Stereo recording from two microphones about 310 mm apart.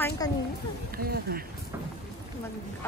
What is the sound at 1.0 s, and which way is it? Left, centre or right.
Speech, right.